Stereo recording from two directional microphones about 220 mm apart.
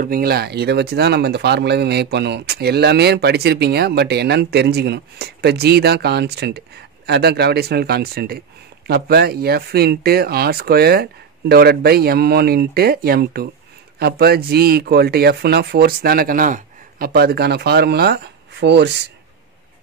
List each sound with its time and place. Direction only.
0.0 s speech: 40° right (ahead or behind)